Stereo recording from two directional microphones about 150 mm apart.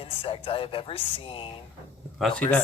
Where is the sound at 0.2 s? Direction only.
35° left (ahead or behind).